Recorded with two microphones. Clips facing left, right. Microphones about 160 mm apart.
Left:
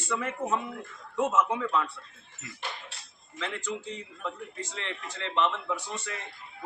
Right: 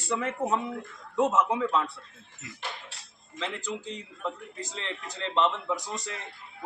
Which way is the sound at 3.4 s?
30° right (ahead or behind).